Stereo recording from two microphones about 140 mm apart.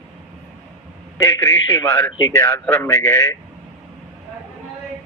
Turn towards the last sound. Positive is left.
turn(degrees=20)  # may be behind; listen again after turning